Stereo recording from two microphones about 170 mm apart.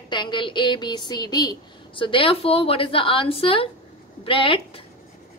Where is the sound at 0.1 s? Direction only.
25° left (ahead or behind).